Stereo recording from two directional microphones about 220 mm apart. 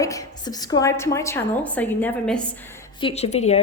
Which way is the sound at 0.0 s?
15° left (ahead or behind).